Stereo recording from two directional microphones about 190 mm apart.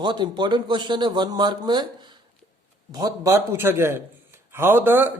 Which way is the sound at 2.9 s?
20° right (ahead or behind).